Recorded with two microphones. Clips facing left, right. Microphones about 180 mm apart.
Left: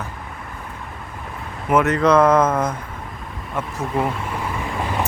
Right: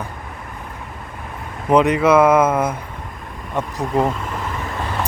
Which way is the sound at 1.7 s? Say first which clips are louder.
Right 2 dB; 15° right (ahead or behind).